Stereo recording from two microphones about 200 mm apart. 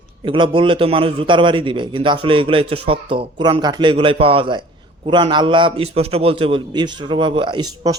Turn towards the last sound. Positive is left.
turn(degrees=-20)  # may be behind; listen again after turning